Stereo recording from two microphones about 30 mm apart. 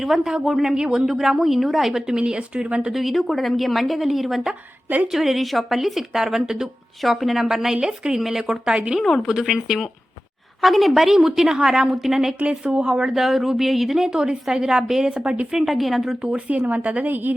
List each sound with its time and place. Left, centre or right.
0.0 s a woman's voice: centre
2.1 s speech: right
2.9 s a woman's voice: centre
7.0 s a woman's voice: centre; by 8.2 s right
8.2 s a woman's voice: centre
10.6 s a woman's voice: centre
11.4 s a woman's voice: right
11.9 s a woman's voice: centre
12.4 s speech: right
13.1 s a woman's voice: centre
14.1 s a woman's voice: right
15.1 s speech: right
15.6 s a woman's voice: centre
16.3 s a woman's voice: right